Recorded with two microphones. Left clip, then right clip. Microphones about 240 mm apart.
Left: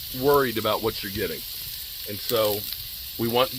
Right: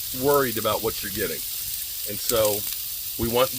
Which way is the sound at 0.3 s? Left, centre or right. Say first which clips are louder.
Left 1 dB; left.